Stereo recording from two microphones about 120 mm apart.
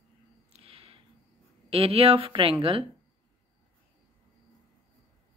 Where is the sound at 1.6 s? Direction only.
55° right (ahead or behind).